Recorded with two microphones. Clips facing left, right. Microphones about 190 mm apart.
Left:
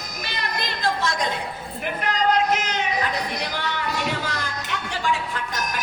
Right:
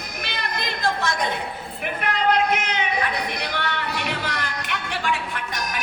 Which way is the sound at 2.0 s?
60° right (ahead or behind).